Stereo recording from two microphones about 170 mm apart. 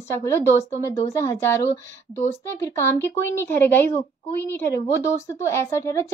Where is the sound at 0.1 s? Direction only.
15° left (ahead or behind).